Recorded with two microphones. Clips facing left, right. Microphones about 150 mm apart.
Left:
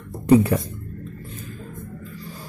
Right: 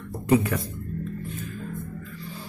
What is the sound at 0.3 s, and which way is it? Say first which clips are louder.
Speech: left 6 dB; 35° left (ahead or behind).